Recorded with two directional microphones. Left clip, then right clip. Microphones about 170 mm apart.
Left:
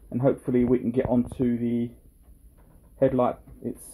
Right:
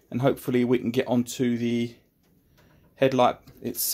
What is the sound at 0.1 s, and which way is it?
Speech, 20° right (ahead or behind).